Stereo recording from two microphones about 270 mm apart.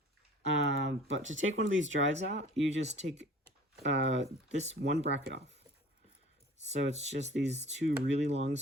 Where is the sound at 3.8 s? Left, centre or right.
Right.